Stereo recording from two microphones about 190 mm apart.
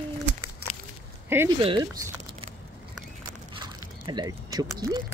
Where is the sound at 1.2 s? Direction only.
10° right (ahead or behind).